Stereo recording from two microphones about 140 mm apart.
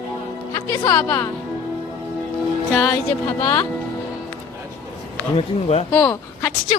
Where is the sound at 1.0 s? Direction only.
25° left (ahead or behind).